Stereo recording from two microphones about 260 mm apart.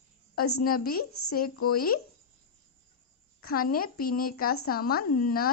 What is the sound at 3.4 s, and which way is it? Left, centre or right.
Speech, left.